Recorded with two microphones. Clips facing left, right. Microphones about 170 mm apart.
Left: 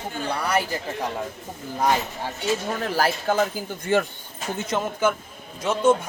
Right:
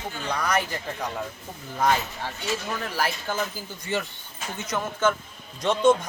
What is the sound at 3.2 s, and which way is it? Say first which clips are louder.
Speech: left 7 dB; 55° left (ahead or behind).